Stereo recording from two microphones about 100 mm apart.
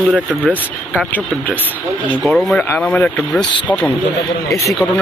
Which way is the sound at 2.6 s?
15° left (ahead or behind).